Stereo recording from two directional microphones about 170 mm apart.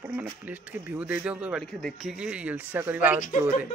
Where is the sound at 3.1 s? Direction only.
50° left (ahead or behind).